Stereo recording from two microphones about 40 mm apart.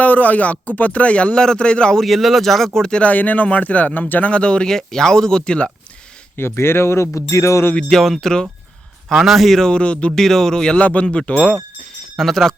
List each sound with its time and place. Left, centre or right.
0.0 s speech: left
1.4 s speech: left
2.0 s speech: centre
3.0 s speech: left
4.7 s speech: centre
6.3 s speech: left
7.9 s speech: centre
9.1 s speech: centre
9.6 s speech: left
10.2 s speech: centre
10.8 s speech: left
11.0 s speech: centre
11.3 s speech: left
12.1 s speech: centre